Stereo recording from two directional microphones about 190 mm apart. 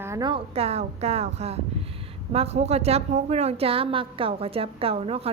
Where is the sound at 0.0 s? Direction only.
20° right (ahead or behind).